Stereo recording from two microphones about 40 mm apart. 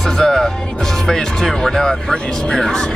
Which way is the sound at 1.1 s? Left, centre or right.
Centre.